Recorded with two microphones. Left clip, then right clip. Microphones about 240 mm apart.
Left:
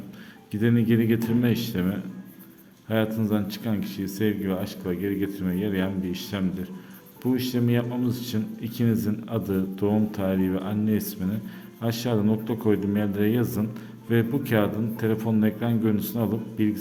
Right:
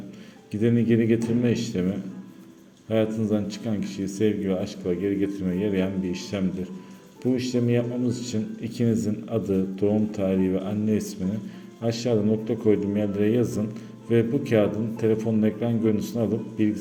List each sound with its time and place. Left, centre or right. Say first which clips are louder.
0.5 s speech: right 1 dB; centre